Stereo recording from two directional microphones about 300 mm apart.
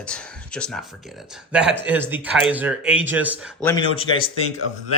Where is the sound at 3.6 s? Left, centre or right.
Centre.